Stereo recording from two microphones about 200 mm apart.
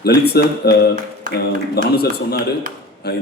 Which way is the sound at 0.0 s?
55° left (ahead or behind).